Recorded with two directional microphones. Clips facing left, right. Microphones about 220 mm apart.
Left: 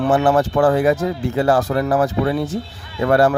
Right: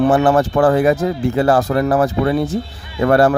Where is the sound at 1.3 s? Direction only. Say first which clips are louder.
Right 1 dB; 75° right (ahead or behind).